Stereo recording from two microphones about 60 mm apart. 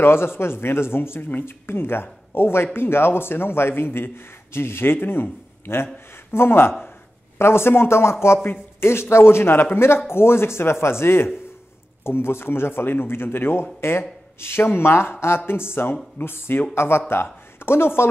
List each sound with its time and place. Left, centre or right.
0.0 s a man's voice: left